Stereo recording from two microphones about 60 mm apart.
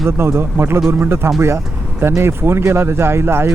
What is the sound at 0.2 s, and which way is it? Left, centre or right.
Speech, right.